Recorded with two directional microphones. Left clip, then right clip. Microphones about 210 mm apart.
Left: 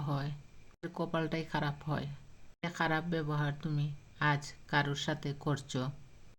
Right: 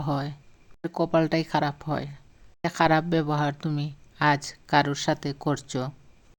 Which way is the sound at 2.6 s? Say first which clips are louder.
Right 12 dB; 40° right (ahead or behind).